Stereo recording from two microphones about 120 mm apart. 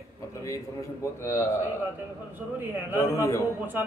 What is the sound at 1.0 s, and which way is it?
Speech, 20° left (ahead or behind).